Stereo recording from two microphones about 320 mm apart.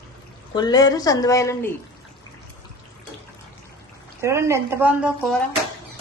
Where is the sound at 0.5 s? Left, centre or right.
Centre.